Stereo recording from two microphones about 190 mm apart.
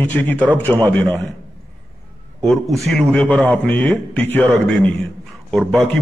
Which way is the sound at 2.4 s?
Centre (ahead or behind).